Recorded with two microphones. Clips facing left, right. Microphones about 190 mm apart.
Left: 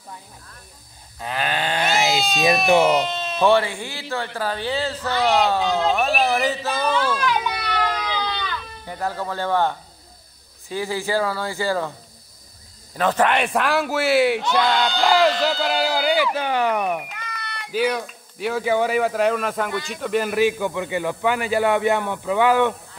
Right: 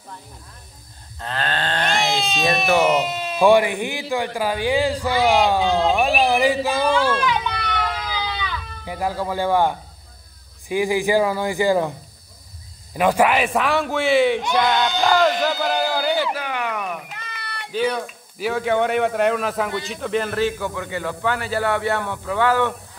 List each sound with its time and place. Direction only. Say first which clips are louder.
1.2 s sheep: left 1 dB; 10° left (ahead or behind)
2.9 s speech: even; 5° right (ahead or behind)
5.7 s a man's voice: right 2 dB; centre (ahead or behind)
5.9 s speech: right 2 dB; 10° right (ahead or behind)
7.2 s a sound: right 1 dB; centre (ahead or behind)
10.7 s speech: right 5 dB; 15° right (ahead or behind)
12.9 s a man's voice: right 2 dB; 10° right (ahead or behind); by 14.4 s 5° left (ahead or behind)
14.4 s speech: even; 20° right (ahead or behind)
16.0 s a sound: left 1 dB; 10° left (ahead or behind)
16.3 s speech: left 5 dB; 30° left (ahead or behind)
17.7 s speech: even; 5° left (ahead or behind)